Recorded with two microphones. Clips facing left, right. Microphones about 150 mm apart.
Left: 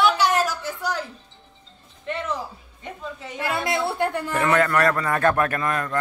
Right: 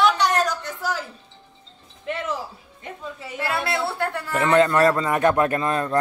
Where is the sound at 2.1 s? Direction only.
5° right (ahead or behind).